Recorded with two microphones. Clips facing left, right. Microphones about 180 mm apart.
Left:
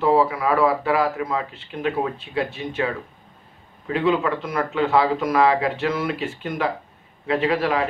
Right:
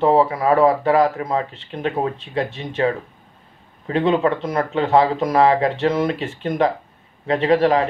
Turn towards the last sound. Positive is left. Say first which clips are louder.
# right 5 dB
turn(degrees=-35)  # may be behind; listen again after turning